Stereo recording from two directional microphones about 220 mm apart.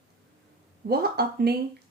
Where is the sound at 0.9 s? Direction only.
45° right (ahead or behind).